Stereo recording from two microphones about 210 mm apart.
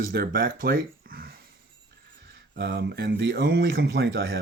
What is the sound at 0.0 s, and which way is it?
Speech, 45° right (ahead or behind).